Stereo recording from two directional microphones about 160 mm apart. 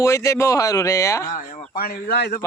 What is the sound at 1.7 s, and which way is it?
Speech, 65° left (ahead or behind).